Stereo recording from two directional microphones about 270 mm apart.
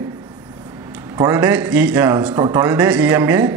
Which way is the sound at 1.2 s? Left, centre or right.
Centre.